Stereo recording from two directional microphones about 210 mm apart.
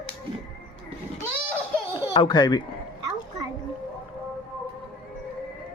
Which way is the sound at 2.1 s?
20° left (ahead or behind).